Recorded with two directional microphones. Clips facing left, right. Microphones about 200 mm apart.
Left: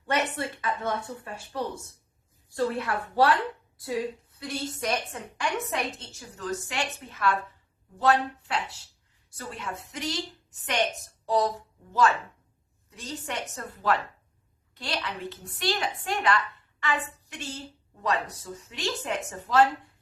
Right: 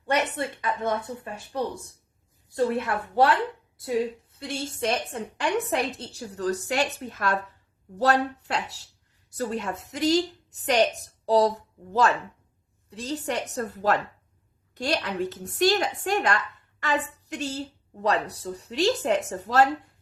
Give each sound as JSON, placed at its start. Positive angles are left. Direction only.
{"t": 0.2, "sound": "a woman's voice", "side_deg": -20}
{"t": 12.9, "sound": "a woman's voice", "side_deg": -35}